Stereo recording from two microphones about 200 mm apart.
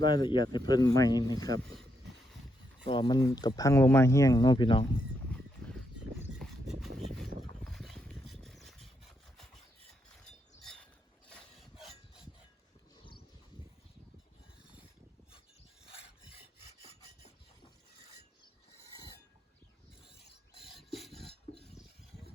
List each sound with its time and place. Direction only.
0.0 s speech: 25° left (ahead or behind)
1.5 s speech: 75° right (ahead or behind)
2.8 s speech: 25° left (ahead or behind)
5.3 s a sound: 5° left (ahead or behind)
7.6 s a sound: centre (ahead or behind)
8.3 s vehicle: centre (ahead or behind)
10.2 s a sound: centre (ahead or behind)
11.3 s rub: 5° left (ahead or behind)
16.6 s rub: 30° left (ahead or behind)
20.6 s filing: centre (ahead or behind)